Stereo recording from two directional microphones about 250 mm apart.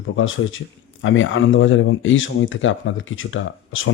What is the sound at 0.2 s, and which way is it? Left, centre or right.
Speech, left.